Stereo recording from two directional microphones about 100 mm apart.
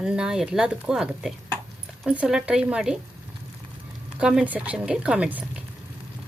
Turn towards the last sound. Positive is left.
turn(degrees=-15)  # may be behind; listen again after turning